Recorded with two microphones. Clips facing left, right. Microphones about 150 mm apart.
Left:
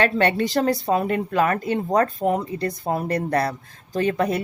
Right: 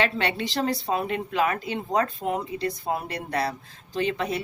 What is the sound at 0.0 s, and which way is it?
Speech, 50° left (ahead or behind).